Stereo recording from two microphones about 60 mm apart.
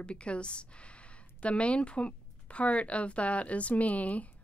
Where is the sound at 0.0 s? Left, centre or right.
Centre.